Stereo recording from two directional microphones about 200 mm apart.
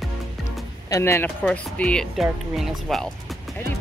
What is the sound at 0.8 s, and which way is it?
A woman's voice, 15° left (ahead or behind).